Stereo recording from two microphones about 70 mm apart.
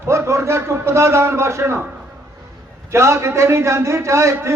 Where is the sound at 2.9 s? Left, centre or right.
Right.